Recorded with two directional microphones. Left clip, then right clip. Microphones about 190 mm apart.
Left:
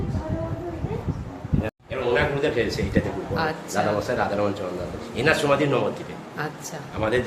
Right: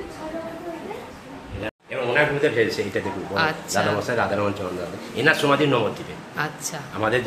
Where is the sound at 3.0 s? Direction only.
35° right (ahead or behind).